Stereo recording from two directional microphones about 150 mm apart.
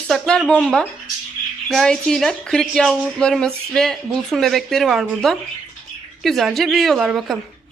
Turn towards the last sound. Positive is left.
turn(degrees=-5)  # may be behind; listen again after turning